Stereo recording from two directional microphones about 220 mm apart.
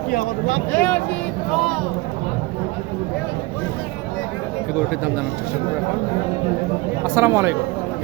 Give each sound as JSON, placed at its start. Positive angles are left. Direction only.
{"t": 0.1, "sound": "speech", "side_deg": 35}
{"t": 0.7, "sound": "speech", "side_deg": 10}
{"t": 7.2, "sound": "speech", "side_deg": -10}